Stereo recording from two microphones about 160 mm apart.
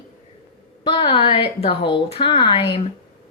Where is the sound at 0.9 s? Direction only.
30° left (ahead or behind).